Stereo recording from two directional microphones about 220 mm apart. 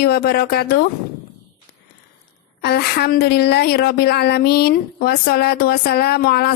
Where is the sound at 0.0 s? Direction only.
45° left (ahead or behind).